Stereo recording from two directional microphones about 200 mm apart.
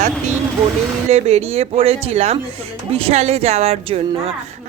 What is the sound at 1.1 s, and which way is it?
A woman's voice, 30° right (ahead or behind).